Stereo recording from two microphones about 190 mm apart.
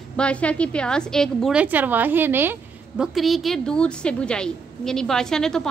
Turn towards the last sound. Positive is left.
turn(degrees=5)  # may be behind; listen again after turning